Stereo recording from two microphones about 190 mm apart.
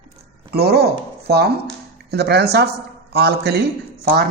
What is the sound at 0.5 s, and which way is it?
A man's voice, 55° right (ahead or behind).